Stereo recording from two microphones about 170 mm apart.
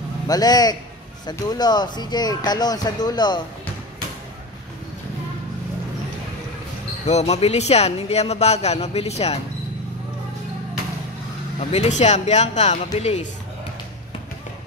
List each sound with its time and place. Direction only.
0.3 s speech: 20° left (ahead or behind)
7.1 s speech: 40° left (ahead or behind)
11.7 s speech: 40° left (ahead or behind)